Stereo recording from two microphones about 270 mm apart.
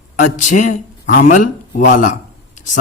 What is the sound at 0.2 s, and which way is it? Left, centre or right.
Speech, left.